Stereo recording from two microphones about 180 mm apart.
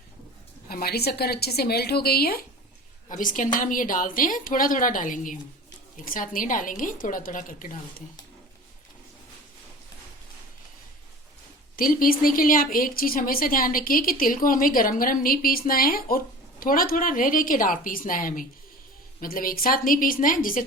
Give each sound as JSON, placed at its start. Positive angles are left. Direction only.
{"t": 0.7, "sound": "a woman's voice", "side_deg": 55}
{"t": 3.1, "sound": "speech", "side_deg": 45}
{"t": 11.8, "sound": "speech", "side_deg": 50}